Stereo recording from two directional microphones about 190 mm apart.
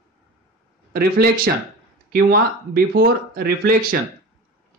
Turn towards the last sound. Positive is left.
turn(degrees=-50)  # may be behind; listen again after turning